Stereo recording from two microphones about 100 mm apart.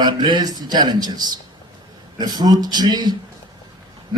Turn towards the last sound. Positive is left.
turn(degrees=-45)  # may be behind; listen again after turning